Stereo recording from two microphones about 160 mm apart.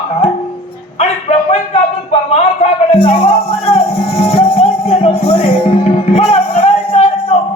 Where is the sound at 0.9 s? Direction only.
40° left (ahead or behind).